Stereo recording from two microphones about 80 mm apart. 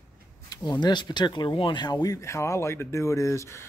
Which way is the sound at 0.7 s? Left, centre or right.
Left.